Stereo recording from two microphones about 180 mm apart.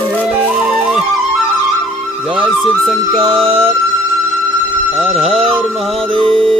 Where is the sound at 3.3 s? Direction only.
30° right (ahead or behind).